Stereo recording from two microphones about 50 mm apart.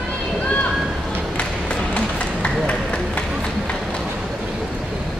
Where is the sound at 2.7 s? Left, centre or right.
Left.